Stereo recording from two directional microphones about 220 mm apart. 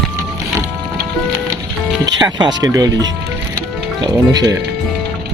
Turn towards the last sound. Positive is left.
turn(degrees=-15)  # may be behind; listen again after turning